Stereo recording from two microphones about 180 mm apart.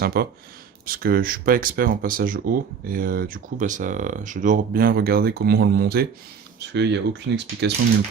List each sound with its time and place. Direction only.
0.0 s speech: 60° right (ahead or behind)
6.6 s speech: 75° right (ahead or behind)